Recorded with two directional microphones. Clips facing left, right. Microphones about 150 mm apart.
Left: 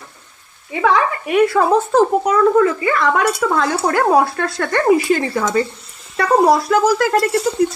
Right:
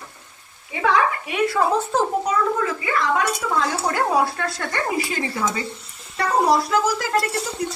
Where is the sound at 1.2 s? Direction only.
55° left (ahead or behind).